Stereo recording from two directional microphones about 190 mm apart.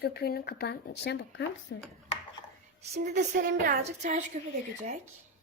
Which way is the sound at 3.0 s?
40° right (ahead or behind).